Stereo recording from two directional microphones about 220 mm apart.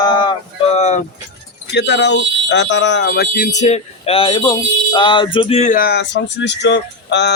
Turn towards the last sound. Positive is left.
turn(degrees=50)  # may be behind; listen again after turning